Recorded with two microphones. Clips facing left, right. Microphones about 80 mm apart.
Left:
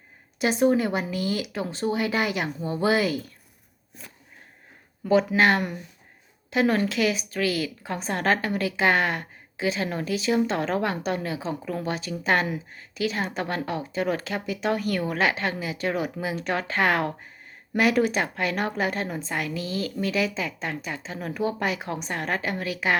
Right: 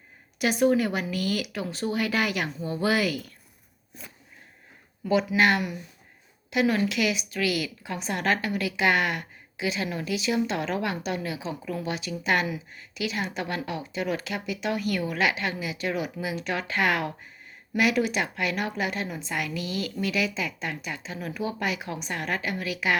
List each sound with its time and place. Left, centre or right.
0.3 s speech: left
5.0 s a woman's voice: left